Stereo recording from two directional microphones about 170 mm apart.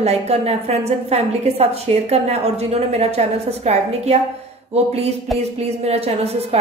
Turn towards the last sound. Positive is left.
turn(degrees=-35)  # may be behind; listen again after turning